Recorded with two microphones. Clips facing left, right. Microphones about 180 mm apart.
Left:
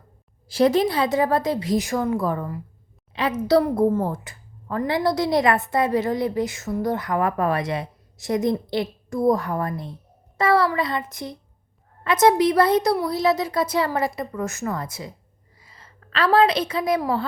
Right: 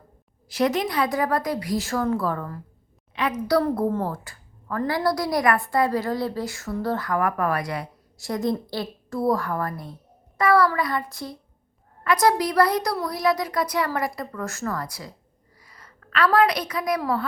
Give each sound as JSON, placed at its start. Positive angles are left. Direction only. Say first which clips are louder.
{"t": 0.4, "sound": "a woman's voice", "louder": "left 5 dB", "side_deg": 30}
{"t": 3.2, "sound": "a woman's voice", "louder": "left 3 dB", "side_deg": 25}
{"t": 3.6, "sound": "a woman's voice", "louder": "left 3 dB", "side_deg": 15}